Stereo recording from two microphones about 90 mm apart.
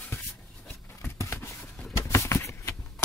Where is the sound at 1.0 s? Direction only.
30° left (ahead or behind).